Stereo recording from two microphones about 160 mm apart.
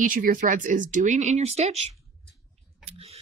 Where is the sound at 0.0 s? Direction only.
60° right (ahead or behind); by 2.0 s 40° right (ahead or behind).